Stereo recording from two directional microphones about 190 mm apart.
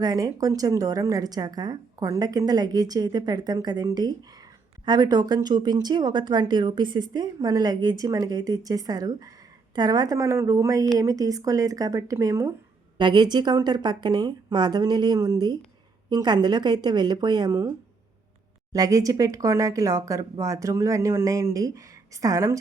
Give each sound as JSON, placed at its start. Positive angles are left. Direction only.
{"t": 0.0, "sound": "speech", "side_deg": -20}
{"t": 18.7, "sound": "speech", "side_deg": -20}